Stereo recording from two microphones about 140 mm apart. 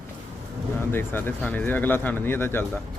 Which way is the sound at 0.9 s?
15° left (ahead or behind).